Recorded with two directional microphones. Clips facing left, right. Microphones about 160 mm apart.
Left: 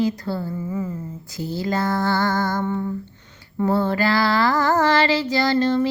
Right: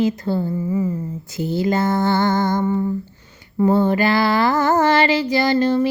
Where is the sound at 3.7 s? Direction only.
20° right (ahead or behind).